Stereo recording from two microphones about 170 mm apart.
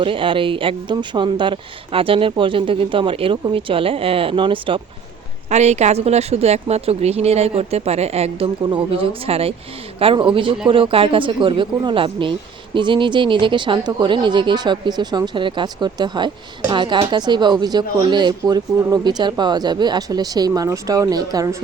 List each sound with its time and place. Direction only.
0.0 s speech: 30° right (ahead or behind)
5.5 s speech: 40° right (ahead or behind); by 21.6 s 20° right (ahead or behind)